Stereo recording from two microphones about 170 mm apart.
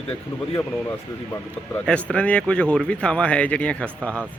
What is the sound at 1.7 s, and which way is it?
Speech, 5° left (ahead or behind).